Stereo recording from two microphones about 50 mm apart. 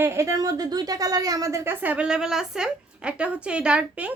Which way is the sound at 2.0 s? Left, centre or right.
Centre.